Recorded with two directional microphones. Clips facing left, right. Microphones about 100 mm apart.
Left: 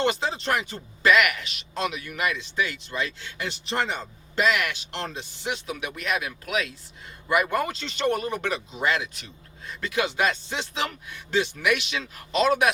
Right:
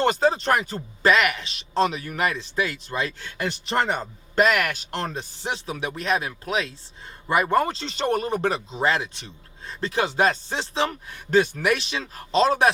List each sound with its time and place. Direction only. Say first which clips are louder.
0.0 s speech: right 5 dB; 40° right (ahead or behind)